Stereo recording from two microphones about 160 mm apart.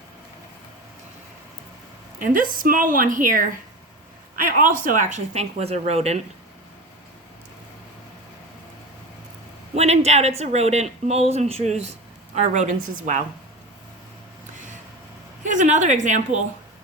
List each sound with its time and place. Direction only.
2.2 s a woman's voice: 60° right (ahead or behind); by 6.2 s 40° right (ahead or behind)
9.7 s speech: 40° right (ahead or behind)
15.4 s speech: 50° right (ahead or behind)